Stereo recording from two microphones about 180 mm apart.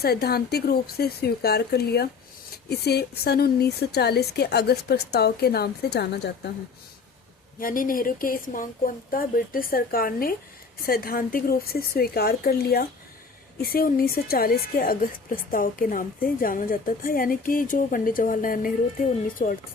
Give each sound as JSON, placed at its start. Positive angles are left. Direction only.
{"t": 0.0, "sound": "a woman's voice", "side_deg": 60}
{"t": 7.6, "sound": "a woman's voice", "side_deg": 50}